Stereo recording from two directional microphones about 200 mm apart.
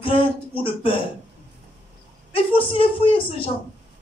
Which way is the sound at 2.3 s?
25° left (ahead or behind).